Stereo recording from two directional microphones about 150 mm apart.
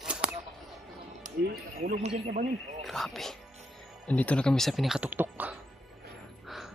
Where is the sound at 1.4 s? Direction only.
90° right.